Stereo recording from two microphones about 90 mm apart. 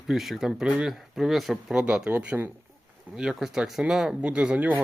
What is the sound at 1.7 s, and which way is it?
Speech, 15° right (ahead or behind).